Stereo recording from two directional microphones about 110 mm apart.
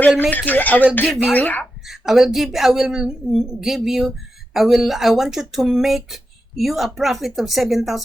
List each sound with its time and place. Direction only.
0.3 s speech: 15° left (ahead or behind)
1.9 s a woman's voice: 5° right (ahead or behind)